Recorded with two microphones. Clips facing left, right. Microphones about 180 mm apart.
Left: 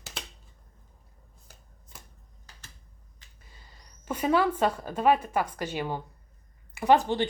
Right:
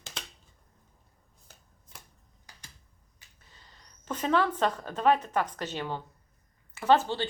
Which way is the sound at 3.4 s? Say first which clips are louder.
Left 2 dB; 10° left (ahead or behind).